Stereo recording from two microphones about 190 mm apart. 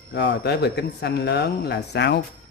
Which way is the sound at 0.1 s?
65° left (ahead or behind).